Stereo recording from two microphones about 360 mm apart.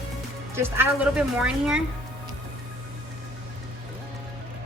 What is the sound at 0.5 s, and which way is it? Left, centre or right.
A woman's voice, centre.